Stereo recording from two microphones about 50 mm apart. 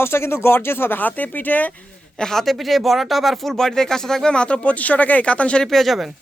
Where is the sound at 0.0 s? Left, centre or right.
Left.